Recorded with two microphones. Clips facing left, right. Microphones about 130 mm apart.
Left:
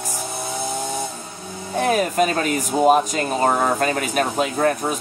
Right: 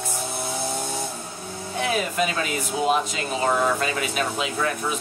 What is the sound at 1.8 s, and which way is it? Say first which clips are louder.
Speech: left 6 dB; 45° left (ahead or behind).